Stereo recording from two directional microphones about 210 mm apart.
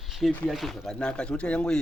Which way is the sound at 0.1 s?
Centre (ahead or behind).